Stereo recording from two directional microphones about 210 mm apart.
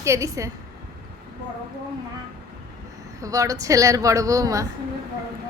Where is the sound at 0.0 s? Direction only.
15° right (ahead or behind).